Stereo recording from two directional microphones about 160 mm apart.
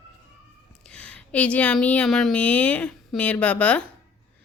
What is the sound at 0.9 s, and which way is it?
A woman's voice, 5° left (ahead or behind).